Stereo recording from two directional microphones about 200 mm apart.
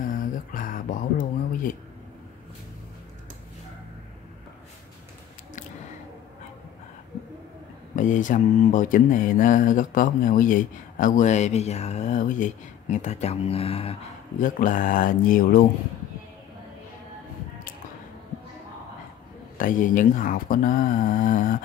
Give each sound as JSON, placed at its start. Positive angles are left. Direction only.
{"t": 0.0, "sound": "a sound", "side_deg": 40}
{"t": 7.9, "sound": "speech", "side_deg": 40}
{"t": 14.4, "sound": "speech", "side_deg": 40}
{"t": 19.5, "sound": "speech", "side_deg": 40}